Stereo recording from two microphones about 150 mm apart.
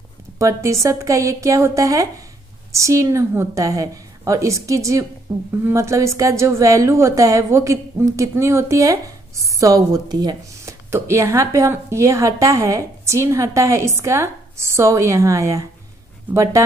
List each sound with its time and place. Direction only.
0.4 s speech: 20° right (ahead or behind)